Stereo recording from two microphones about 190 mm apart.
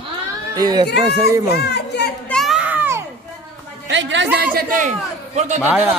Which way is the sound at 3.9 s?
75° right (ahead or behind).